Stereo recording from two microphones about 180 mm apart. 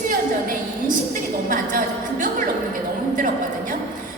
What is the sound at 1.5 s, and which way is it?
Speech, 50° right (ahead or behind).